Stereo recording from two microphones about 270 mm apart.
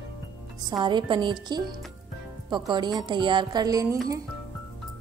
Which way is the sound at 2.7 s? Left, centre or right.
Centre.